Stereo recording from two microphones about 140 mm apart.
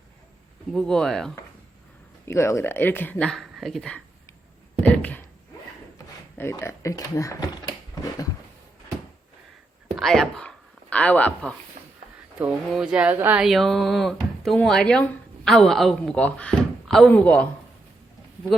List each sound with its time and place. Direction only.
0.7 s speech: 5° left (ahead or behind)
2.2 s speech: 20° left (ahead or behind)
6.3 s speech: 20° left (ahead or behind)
9.9 s speech: centre (ahead or behind)
12.4 s speech: 5° right (ahead or behind)
13.4 s speech: centre (ahead or behind)